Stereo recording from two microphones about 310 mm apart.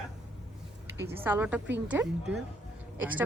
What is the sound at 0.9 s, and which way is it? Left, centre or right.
A woman's voice, centre.